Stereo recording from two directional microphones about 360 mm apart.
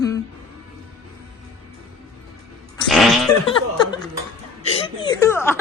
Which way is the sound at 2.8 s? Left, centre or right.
Centre.